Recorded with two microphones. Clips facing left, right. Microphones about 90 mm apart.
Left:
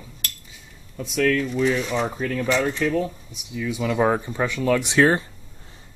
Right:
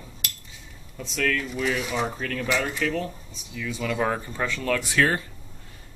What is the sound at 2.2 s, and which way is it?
Speech, 10° left (ahead or behind).